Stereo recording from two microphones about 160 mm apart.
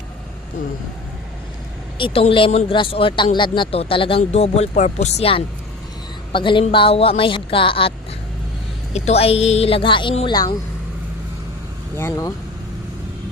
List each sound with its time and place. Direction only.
2.0 s speech: 35° left (ahead or behind)
11.9 s speech: 20° left (ahead or behind)